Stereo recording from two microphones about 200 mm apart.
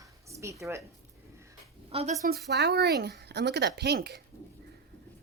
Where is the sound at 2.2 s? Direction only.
55° right (ahead or behind).